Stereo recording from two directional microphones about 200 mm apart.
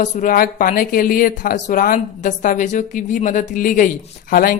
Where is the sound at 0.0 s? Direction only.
40° left (ahead or behind).